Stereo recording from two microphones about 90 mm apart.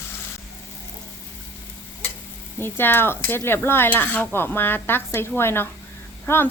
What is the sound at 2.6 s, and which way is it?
Speech, 25° left (ahead or behind).